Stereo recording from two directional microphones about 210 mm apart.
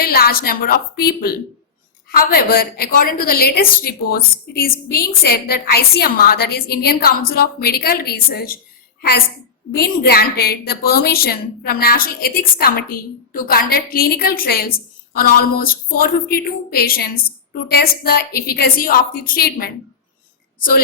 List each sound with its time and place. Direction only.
0.0 s a woman's voice: 45° left (ahead or behind)